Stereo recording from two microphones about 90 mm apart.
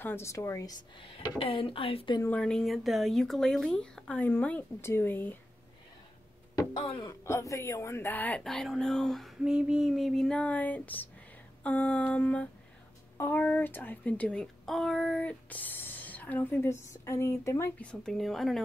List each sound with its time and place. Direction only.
0.0 s a woman's voice: 30° left (ahead or behind)
1.4 s speech: 85° left
2.3 s speech: 5° left (ahead or behind)
4.2 s a sound: 15° left (ahead or behind)
4.8 s speech: 25° left (ahead or behind)
7.2 s speech: 35° left (ahead or behind)
8.5 s speech: 5° left (ahead or behind)
9.4 s speech: 10° right (ahead or behind)
10.3 s a sound: 15° left (ahead or behind)
13.2 s speech: 20° left (ahead or behind)
16.6 s speech: 30° left (ahead or behind)
17.7 s speech: 10° left (ahead or behind)